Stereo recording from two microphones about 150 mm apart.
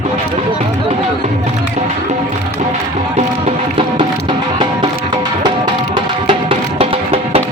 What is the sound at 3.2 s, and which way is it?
Music, 40° right (ahead or behind).